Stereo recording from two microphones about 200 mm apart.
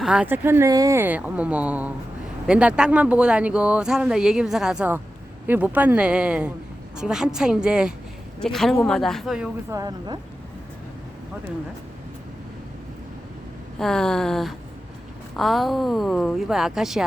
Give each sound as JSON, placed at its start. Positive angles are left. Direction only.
{"t": 0.0, "sound": "speech", "side_deg": -5}
{"t": 9.7, "sound": "speech", "side_deg": -20}
{"t": 13.7, "sound": "speech", "side_deg": 5}